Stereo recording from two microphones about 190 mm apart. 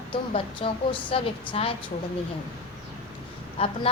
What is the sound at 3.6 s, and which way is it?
Speech, 30° left (ahead or behind).